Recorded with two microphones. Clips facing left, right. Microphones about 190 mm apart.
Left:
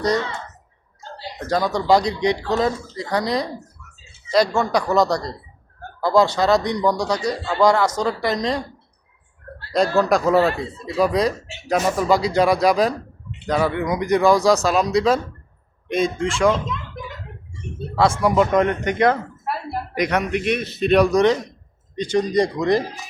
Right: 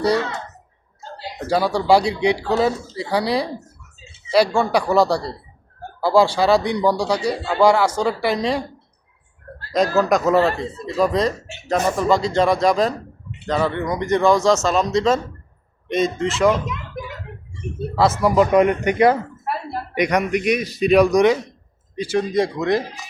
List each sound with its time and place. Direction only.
1.4 s speech: 10° right (ahead or behind)
6.8 s speech: 30° right (ahead or behind)
7.3 s speech: 10° right (ahead or behind)
9.7 s speech: 5° right (ahead or behind)
20.3 s speech: centre (ahead or behind)